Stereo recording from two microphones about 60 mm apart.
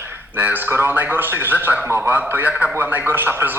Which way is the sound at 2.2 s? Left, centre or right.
Right.